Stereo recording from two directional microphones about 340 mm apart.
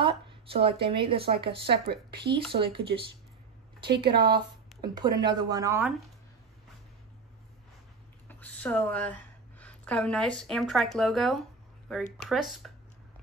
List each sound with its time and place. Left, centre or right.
0.0 s a sound: centre
0.8 s speech: centre
1.9 s speech: right
2.5 s speech: centre
4.1 s speech: right
4.8 s speech: centre
8.3 s a woman's voice: centre